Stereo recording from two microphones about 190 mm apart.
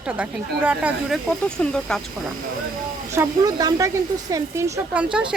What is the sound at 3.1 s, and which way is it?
A man's voice, 15° right (ahead or behind).